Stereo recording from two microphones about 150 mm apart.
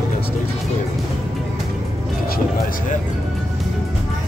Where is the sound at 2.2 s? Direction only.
75° left (ahead or behind).